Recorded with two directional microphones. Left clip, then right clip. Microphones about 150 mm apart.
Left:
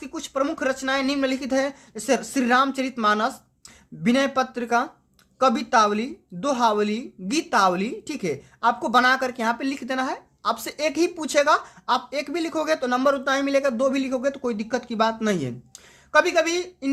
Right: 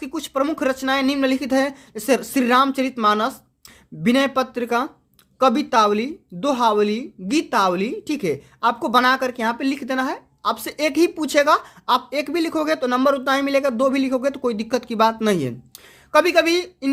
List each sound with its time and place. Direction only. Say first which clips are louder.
0.0 s speech: right 3 dB; 35° right (ahead or behind)